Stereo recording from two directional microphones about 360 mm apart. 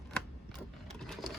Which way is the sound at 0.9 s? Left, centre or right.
Centre.